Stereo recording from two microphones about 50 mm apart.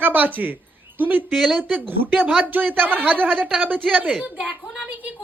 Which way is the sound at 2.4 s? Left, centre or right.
Right.